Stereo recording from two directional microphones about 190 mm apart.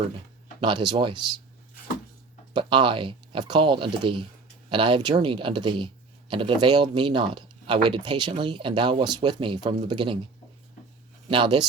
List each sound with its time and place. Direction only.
0.6 s speech: 25° right (ahead or behind)
2.5 s speech: 25° right (ahead or behind)
11.3 s speech: 25° right (ahead or behind)